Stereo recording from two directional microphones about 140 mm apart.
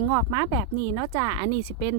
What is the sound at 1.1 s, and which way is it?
Speech, 30° right (ahead or behind).